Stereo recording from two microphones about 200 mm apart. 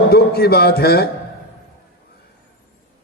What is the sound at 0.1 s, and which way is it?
A man's voice, 50° left (ahead or behind).